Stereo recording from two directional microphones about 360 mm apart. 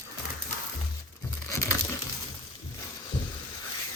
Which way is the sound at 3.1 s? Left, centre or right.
Centre.